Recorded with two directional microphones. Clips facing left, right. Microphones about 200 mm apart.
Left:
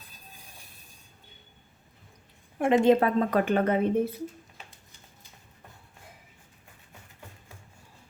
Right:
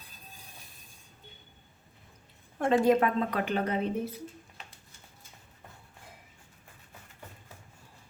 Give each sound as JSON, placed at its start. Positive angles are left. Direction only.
{"t": 2.6, "sound": "a woman's voice", "side_deg": 20}
{"t": 3.2, "sound": "speech", "side_deg": 45}